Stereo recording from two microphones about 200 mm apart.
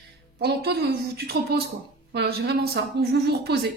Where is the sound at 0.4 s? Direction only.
55° right (ahead or behind).